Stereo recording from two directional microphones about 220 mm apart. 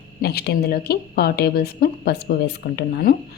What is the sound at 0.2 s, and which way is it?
Speech, 45° left (ahead or behind).